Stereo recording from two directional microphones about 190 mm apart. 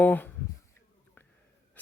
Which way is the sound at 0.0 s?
10° left (ahead or behind).